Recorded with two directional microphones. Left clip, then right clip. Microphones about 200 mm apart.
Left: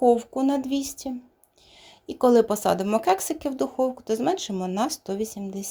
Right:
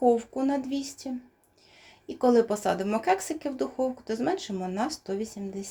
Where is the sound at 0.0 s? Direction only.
25° left (ahead or behind).